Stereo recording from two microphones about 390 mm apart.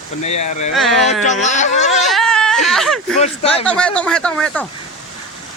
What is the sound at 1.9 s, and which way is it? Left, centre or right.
Baby cry, centre.